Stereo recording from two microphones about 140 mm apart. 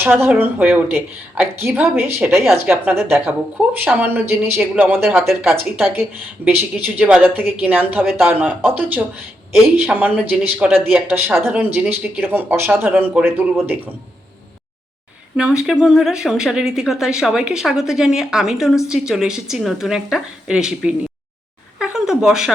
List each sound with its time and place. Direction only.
0.0 s speech: 15° right (ahead or behind)
15.4 s speech: 5° right (ahead or behind)